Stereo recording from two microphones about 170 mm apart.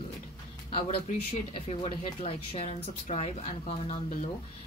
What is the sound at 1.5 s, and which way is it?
Speech, 35° left (ahead or behind).